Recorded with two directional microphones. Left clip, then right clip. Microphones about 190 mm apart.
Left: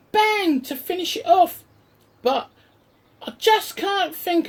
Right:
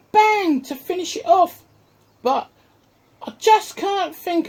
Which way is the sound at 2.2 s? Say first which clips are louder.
Right 1 dB; 40° right (ahead or behind).